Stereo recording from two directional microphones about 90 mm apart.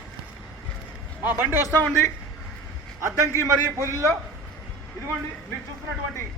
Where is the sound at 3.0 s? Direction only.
35° right (ahead or behind).